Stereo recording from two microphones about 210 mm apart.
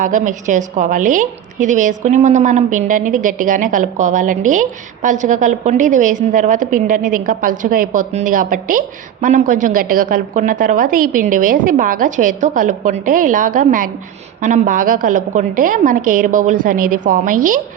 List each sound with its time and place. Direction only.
0.0 s a woman's voice: 35° right (ahead or behind)